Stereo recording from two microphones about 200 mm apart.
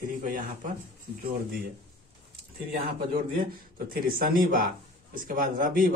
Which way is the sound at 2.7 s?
50° right (ahead or behind).